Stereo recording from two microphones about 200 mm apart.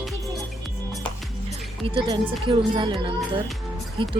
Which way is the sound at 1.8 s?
25° right (ahead or behind).